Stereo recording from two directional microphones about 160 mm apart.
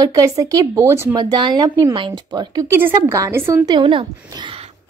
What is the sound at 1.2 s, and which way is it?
A woman's voice, 25° right (ahead or behind).